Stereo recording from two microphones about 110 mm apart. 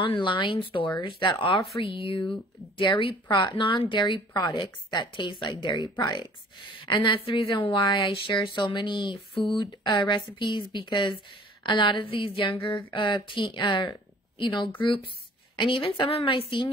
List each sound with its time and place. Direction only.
0.0 s a woman's voice: 50° left (ahead or behind)